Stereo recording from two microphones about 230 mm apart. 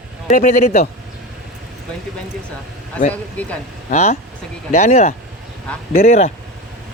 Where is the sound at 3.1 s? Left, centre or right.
Centre.